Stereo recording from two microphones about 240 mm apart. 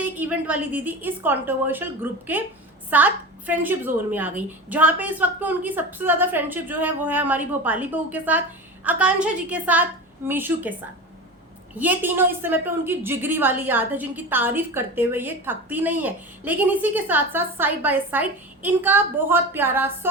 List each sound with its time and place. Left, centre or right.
0.0 s a woman's voice: centre